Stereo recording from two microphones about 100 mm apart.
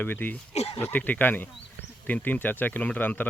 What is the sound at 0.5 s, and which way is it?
Speech, 90° left.